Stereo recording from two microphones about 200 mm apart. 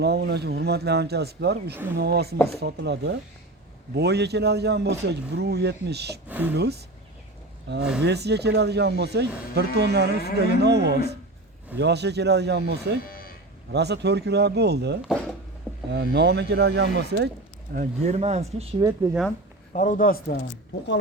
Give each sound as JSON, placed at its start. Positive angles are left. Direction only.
{"t": 0.0, "sound": "speech", "side_deg": -55}
{"t": 1.7, "sound": "speech", "side_deg": -10}
{"t": 2.0, "sound": "speech", "side_deg": -55}
{"t": 6.2, "sound": "speech", "side_deg": -10}
{"t": 6.5, "sound": "speech", "side_deg": -55}
{"t": 8.0, "sound": "speech", "side_deg": -55}
{"t": 13.1, "sound": "sheep", "side_deg": 45}
{"t": 13.7, "sound": "speech", "side_deg": -55}
{"t": 17.7, "sound": "speech", "side_deg": -35}
{"t": 18.8, "sound": "speech", "side_deg": -15}
{"t": 19.7, "sound": "a man's voice", "side_deg": 40}